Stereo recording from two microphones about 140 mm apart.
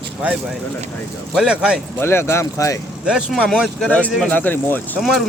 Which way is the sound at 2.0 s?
15° left (ahead or behind).